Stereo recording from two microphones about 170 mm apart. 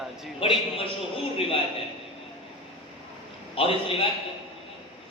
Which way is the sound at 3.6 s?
35° left (ahead or behind).